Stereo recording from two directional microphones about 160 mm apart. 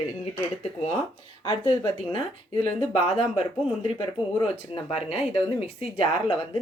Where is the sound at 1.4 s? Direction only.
30° left (ahead or behind).